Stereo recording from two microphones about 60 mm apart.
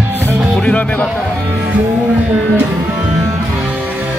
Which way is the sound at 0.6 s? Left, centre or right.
Left.